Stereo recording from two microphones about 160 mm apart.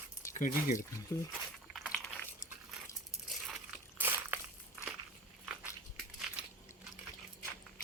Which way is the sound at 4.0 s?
10° right (ahead or behind).